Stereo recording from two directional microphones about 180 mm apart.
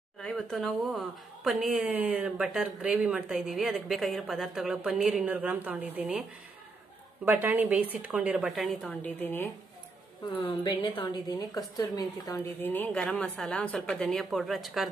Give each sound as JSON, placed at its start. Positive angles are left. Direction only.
{"t": 0.2, "sound": "speech", "side_deg": 0}
{"t": 7.2, "sound": "a woman's voice", "side_deg": -10}
{"t": 10.3, "sound": "speech", "side_deg": 30}
{"t": 12.7, "sound": "speech", "side_deg": 10}